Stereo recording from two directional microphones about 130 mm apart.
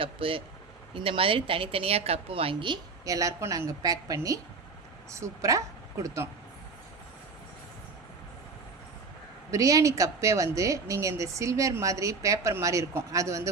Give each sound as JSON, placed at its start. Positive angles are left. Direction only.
{"t": 0.0, "sound": "a woman's voice", "side_deg": -45}
{"t": 3.0, "sound": "a woman's voice", "side_deg": -25}
{"t": 9.5, "sound": "a woman's voice", "side_deg": -25}